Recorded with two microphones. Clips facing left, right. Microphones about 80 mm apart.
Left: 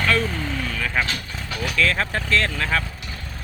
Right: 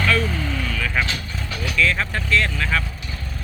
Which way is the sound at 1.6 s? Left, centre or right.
Left.